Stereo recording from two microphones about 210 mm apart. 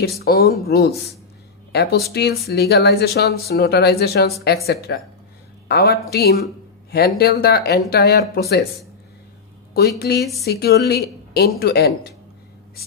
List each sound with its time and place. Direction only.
0.2 s speech: 45° left (ahead or behind)
9.8 s speech: 45° left (ahead or behind)